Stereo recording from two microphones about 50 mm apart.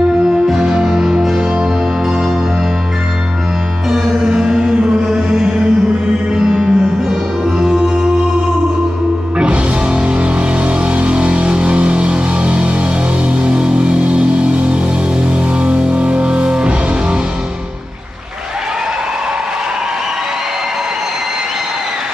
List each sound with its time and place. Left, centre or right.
0.6 s music: centre
3.9 s music: centre
9.4 s music: centre